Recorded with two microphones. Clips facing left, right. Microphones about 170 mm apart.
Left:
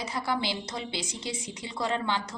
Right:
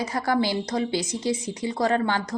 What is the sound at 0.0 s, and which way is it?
A woman's voice, 45° right (ahead or behind).